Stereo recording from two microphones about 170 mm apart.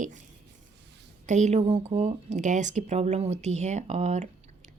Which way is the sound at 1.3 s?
45° right (ahead or behind).